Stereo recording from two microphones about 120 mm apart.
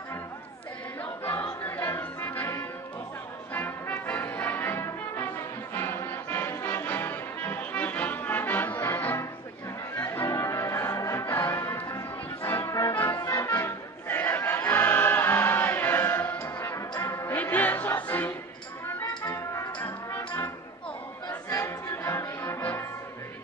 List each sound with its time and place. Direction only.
1.2 s music: 15° left (ahead or behind)
21.5 s music: 25° left (ahead or behind)